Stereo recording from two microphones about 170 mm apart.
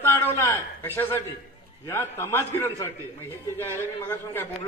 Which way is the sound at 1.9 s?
15° left (ahead or behind).